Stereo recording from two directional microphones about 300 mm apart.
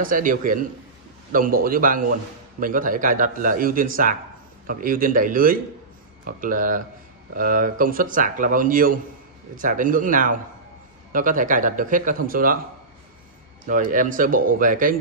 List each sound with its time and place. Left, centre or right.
0.0 s a man's voice: right
13.7 s a man's voice: right